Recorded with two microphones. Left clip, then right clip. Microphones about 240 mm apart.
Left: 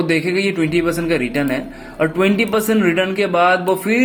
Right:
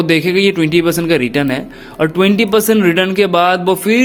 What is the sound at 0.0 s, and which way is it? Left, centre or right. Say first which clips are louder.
A man's voice: right 5 dB; right.